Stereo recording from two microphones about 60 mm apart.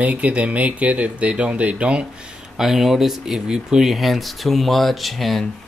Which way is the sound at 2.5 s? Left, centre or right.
Centre.